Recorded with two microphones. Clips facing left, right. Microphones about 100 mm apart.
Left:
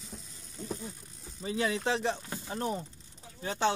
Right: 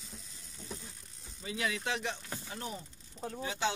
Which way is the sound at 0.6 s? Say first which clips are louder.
Left 8 dB; 45° left (ahead or behind).